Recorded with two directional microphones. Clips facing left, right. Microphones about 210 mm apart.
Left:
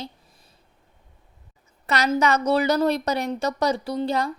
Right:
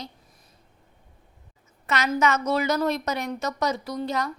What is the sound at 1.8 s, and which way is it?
A woman's voice, 35° left (ahead or behind).